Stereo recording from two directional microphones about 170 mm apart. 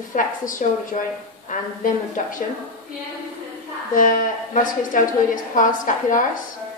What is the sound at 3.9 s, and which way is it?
A woman's voice, 50° left (ahead or behind).